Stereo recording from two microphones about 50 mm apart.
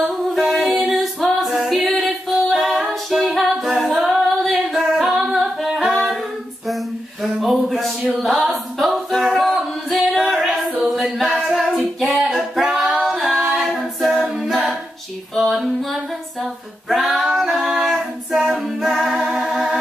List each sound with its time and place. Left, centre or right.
0.0 s music: centre
2.9 s a capella: centre
4.1 s singing: centre
7.3 s a sound: centre
7.8 s a capella: centre
10.8 s singing: centre
12.8 s female singing: centre
13.6 s a capella: centre
15.3 s female singing: centre
19.4 s music: centre